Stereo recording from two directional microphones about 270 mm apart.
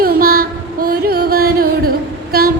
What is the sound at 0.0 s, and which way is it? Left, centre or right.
Music, right.